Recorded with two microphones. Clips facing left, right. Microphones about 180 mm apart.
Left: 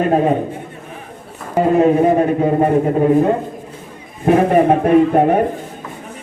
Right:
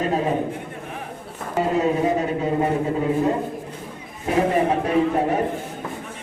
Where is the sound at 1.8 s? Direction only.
55° left (ahead or behind).